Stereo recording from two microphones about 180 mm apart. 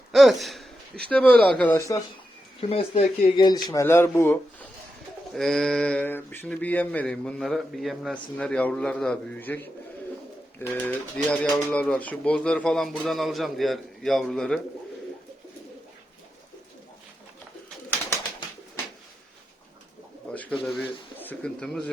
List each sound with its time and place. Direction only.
0.1 s a sound: centre (ahead or behind)
1.0 s speech: 5° left (ahead or behind)
2.6 s speech: 35° left (ahead or behind); by 4.4 s 15° left (ahead or behind)
5.3 s speech: centre (ahead or behind)
10.8 s speech: 5° left (ahead or behind)
20.3 s speech: 10° left (ahead or behind)